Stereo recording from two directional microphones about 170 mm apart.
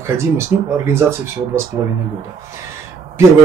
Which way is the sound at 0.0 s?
15° right (ahead or behind).